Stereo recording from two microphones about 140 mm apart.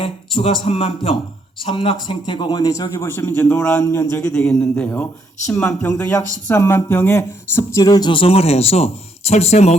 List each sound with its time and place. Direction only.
0.3 s a man's voice: 40° left (ahead or behind); by 5.9 s 10° left (ahead or behind)
6.0 s a man's voice: 20° left (ahead or behind); by 9.7 s 50° left (ahead or behind)